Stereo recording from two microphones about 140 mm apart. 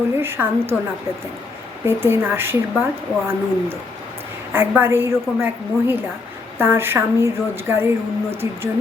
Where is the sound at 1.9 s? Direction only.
15° right (ahead or behind).